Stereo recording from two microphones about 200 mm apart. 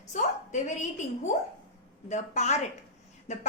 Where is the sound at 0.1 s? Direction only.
35° left (ahead or behind).